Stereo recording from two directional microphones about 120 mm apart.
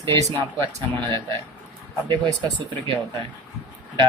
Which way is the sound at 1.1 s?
25° left (ahead or behind).